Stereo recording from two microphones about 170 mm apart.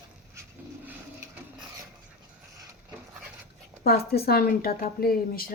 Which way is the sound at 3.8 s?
65° left (ahead or behind).